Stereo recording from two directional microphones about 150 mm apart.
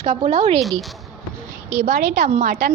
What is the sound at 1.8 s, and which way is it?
Speech, 75° right (ahead or behind).